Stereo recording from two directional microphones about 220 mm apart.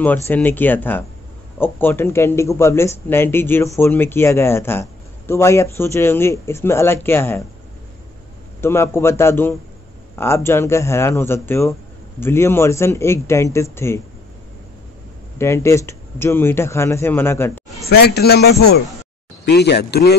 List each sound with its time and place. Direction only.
0.0 s speech: 10° left (ahead or behind)
8.5 s speech: 10° left (ahead or behind)
15.3 s speech: 10° left (ahead or behind)
17.8 s a man's voice: 45° left (ahead or behind)